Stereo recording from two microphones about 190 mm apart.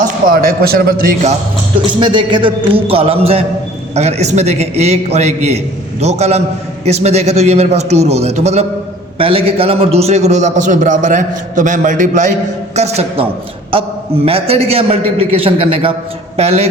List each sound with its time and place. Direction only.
0.0 s a man's voice: 50° right (ahead or behind)
1.9 s a man's voice: 25° right (ahead or behind)
14.3 s a man's voice: 30° right (ahead or behind)